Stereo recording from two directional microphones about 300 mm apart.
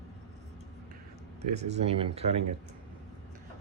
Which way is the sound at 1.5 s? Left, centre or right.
Right.